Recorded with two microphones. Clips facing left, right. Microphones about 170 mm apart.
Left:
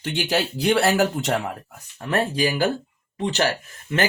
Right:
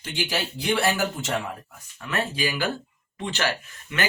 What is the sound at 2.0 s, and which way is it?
Speech, 45° left (ahead or behind).